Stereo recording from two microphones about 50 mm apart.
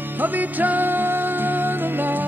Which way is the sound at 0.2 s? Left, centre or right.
Right.